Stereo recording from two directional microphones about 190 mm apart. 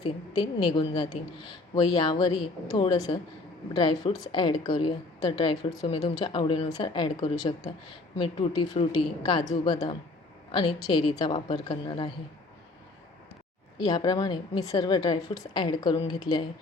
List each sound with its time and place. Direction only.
0.0 s a woman's voice: 25° left (ahead or behind)
8.2 s a woman's voice: 20° left (ahead or behind)
13.7 s a woman's voice: 20° left (ahead or behind)